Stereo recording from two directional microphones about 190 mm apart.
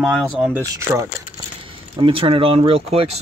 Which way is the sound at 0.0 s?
Centre (ahead or behind).